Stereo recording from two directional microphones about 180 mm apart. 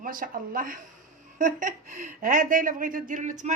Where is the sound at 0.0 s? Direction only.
50° right (ahead or behind).